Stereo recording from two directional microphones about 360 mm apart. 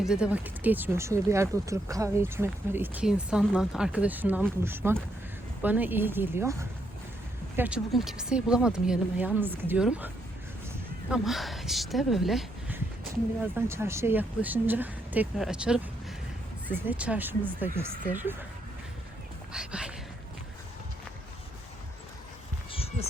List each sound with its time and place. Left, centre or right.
0.0 s speech: centre
11.1 s speech: centre
19.5 s speech: centre
22.7 s heart sounds: centre